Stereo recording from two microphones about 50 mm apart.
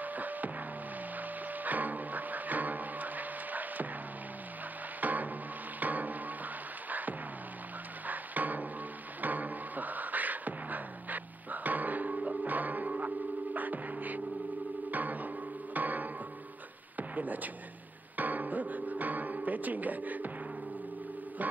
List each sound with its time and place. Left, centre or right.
0.0 s a sound: right
1.6 s music: right
5.0 s music: right
9.2 s beatboxing: right
14.9 s music: right
16.9 s a sound: right
18.1 s music: right